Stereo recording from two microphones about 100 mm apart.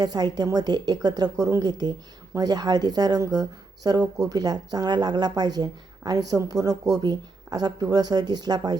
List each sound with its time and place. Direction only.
0.0 s a woman's voice: 45° right (ahead or behind)